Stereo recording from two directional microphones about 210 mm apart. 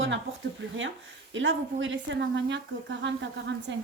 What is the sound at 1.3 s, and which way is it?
A woman's voice, 65° right (ahead or behind).